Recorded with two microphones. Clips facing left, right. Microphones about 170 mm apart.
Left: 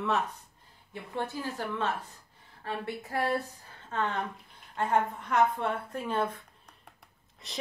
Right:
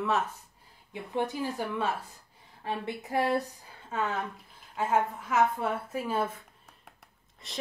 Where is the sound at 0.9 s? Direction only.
15° right (ahead or behind).